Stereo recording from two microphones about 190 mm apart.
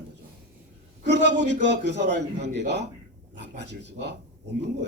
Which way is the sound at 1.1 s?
65° right (ahead or behind).